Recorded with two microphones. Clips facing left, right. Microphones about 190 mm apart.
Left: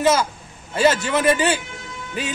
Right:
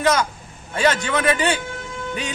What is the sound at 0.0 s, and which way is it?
A man's voice, 5° left (ahead or behind).